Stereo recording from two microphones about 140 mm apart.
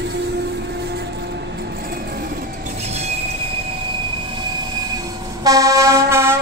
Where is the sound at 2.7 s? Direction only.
50° right (ahead or behind); by 6.3 s 20° right (ahead or behind).